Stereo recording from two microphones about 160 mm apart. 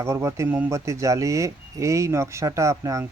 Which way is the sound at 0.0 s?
15° right (ahead or behind).